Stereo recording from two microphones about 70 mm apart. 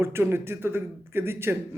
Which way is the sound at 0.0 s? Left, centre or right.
Right.